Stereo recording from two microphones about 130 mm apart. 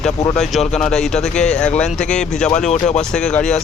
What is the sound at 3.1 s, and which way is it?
Speech, 5° left (ahead or behind).